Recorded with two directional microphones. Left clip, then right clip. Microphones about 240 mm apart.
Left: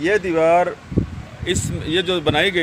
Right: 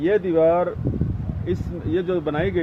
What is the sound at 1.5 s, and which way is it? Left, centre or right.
Speech, left.